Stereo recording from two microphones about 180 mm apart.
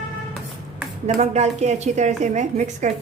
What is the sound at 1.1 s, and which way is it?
A woman's voice, 40° right (ahead or behind).